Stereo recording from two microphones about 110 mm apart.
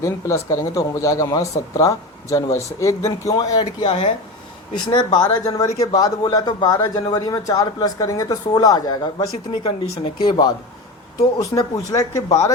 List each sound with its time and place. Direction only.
0.0 s speech: 30° left (ahead or behind)
3.8 s speech: 55° left (ahead or behind)
11.3 s speech: 30° left (ahead or behind)